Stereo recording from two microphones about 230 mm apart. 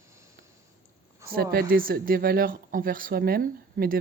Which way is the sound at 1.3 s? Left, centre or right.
Right.